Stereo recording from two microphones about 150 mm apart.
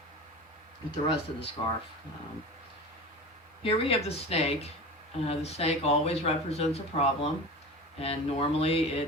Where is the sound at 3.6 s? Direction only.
40° left (ahead or behind).